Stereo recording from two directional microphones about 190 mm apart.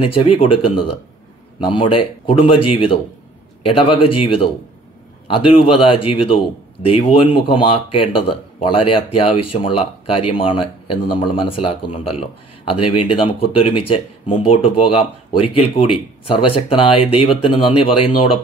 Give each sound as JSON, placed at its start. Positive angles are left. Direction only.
{"t": 0.0, "sound": "speech", "side_deg": 30}